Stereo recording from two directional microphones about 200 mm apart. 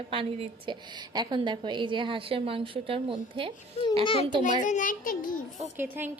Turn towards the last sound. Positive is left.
turn(degrees=-10)  # may be behind; listen again after turning